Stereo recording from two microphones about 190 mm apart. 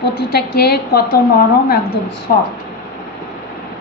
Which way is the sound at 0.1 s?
55° left (ahead or behind).